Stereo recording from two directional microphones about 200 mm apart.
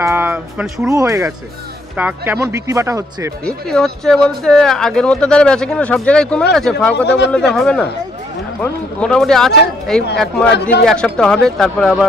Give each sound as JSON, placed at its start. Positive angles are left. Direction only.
{"t": 0.0, "sound": "speech", "side_deg": -10}
{"t": 3.4, "sound": "speech", "side_deg": 5}
{"t": 10.5, "sound": "speech", "side_deg": 55}
{"t": 10.8, "sound": "speech", "side_deg": 5}